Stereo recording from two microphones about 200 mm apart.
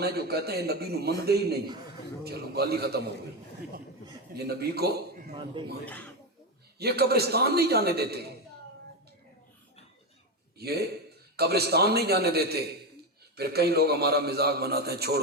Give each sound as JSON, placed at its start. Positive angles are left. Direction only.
{"t": 0.0, "sound": "a man's voice", "side_deg": -50}
{"t": 4.4, "sound": "a man's voice", "side_deg": -50}
{"t": 5.8, "sound": "speech", "side_deg": 10}
{"t": 6.7, "sound": "a man's voice", "side_deg": -50}
{"t": 10.6, "sound": "a man's voice", "side_deg": -50}